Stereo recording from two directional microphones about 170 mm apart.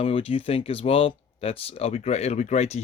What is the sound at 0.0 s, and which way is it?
Speech, 35° left (ahead or behind).